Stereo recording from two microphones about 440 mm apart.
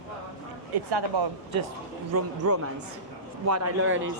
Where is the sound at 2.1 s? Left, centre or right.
Right.